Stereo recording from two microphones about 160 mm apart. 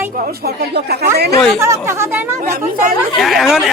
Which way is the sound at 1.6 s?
15° right (ahead or behind).